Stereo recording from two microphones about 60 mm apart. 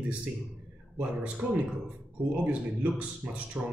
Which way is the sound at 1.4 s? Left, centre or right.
Centre.